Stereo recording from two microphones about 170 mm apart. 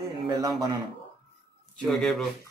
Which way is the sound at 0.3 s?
20° right (ahead or behind).